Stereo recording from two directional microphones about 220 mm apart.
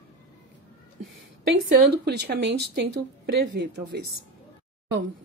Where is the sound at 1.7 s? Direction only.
50° right (ahead or behind).